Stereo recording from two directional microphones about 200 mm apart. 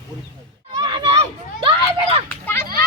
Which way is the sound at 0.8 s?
25° right (ahead or behind).